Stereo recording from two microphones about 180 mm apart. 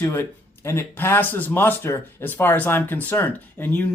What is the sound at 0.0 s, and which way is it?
Speech, 15° left (ahead or behind).